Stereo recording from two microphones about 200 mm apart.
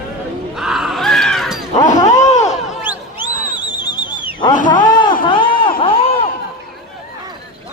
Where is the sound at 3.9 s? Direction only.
20° left (ahead or behind).